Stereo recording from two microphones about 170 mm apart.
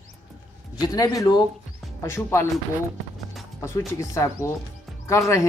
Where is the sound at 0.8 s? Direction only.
20° left (ahead or behind).